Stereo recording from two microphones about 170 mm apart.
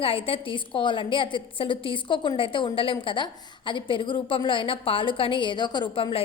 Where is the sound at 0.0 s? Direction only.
35° left (ahead or behind).